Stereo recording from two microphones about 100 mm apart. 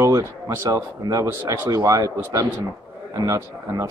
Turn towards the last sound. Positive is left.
turn(degrees=-35)  # may be behind; listen again after turning